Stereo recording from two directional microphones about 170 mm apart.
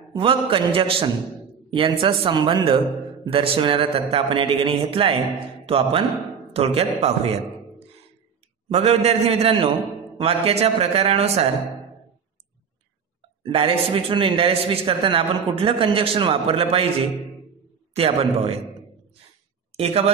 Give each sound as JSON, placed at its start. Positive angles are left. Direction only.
{"t": 0.1, "sound": "a man's voice", "side_deg": -30}
{"t": 8.7, "sound": "a man's voice", "side_deg": -40}
{"t": 13.4, "sound": "a man's voice", "side_deg": -30}
{"t": 17.9, "sound": "a man's voice", "side_deg": -35}
{"t": 19.7, "sound": "a woman's voice", "side_deg": -35}